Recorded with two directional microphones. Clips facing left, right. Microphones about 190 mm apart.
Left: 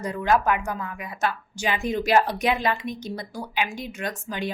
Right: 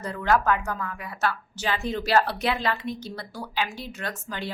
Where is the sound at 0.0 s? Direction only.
15° left (ahead or behind).